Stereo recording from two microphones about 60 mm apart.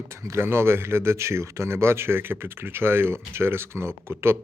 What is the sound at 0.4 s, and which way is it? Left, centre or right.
Speech, right.